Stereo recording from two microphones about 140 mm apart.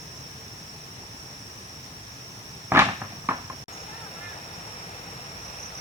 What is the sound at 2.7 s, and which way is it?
Cupboard open or close, 15° right (ahead or behind).